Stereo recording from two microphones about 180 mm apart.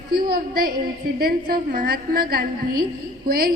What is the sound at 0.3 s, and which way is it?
A woman's voice, 50° right (ahead or behind).